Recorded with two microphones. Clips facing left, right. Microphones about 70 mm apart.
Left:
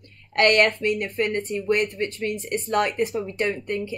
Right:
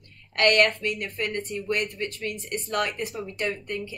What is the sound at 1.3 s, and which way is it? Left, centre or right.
Speech, left.